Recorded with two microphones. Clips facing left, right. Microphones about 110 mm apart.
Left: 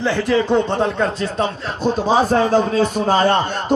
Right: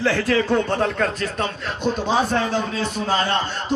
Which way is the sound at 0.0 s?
15° left (ahead or behind).